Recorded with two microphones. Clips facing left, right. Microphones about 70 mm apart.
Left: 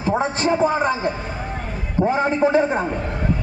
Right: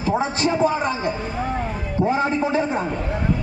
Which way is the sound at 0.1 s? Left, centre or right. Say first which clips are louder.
Left 1 dB; left.